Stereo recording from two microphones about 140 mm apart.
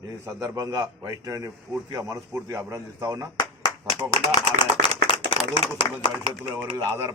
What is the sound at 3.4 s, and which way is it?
Clapping, 25° left (ahead or behind).